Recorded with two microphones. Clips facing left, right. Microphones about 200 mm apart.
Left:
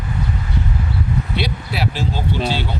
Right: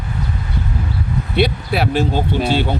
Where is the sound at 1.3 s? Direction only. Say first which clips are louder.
Right 6 dB; 55° right (ahead or behind).